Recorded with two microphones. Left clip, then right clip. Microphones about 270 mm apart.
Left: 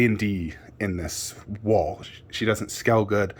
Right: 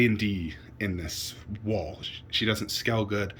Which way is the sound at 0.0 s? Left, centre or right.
Centre.